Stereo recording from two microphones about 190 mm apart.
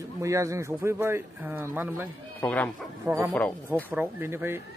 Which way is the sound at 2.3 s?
10° left (ahead or behind).